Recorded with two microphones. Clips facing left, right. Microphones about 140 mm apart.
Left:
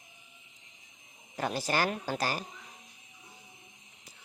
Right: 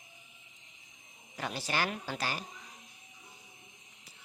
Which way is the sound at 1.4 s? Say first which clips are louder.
Left 4 dB; 45° left (ahead or behind).